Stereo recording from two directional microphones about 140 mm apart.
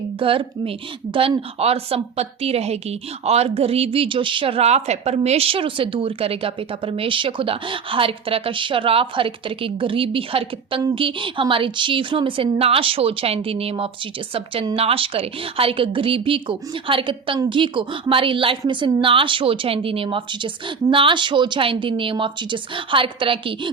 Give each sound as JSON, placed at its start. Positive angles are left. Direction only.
{"t": 0.2, "sound": "a woman's voice", "side_deg": -40}